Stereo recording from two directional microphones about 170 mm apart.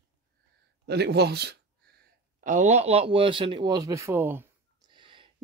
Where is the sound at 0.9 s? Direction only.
75° right (ahead or behind).